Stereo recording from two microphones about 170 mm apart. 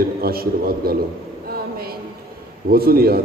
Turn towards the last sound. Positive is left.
turn(degrees=-60)  # may be behind; listen again after turning